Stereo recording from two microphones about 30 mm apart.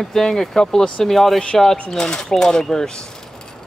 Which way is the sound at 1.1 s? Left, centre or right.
Centre.